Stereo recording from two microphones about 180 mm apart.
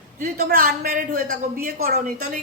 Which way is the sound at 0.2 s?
50° right (ahead or behind).